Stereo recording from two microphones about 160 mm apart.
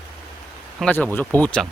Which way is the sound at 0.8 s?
10° left (ahead or behind).